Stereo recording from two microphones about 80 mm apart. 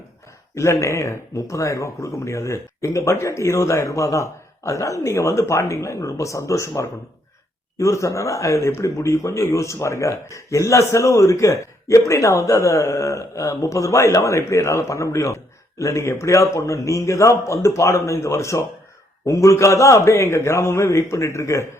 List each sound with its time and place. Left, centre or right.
0.5 s speech: left